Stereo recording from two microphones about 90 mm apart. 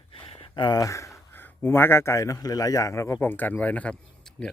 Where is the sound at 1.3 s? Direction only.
25° left (ahead or behind).